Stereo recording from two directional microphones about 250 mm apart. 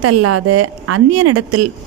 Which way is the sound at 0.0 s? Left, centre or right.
Right.